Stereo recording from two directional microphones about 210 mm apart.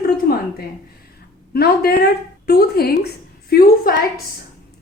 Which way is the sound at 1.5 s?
50° left (ahead or behind).